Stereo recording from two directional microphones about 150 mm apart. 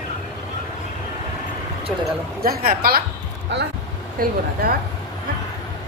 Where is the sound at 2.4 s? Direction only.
85° right.